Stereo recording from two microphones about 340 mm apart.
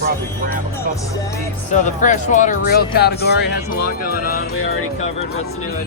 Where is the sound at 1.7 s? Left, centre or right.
Left.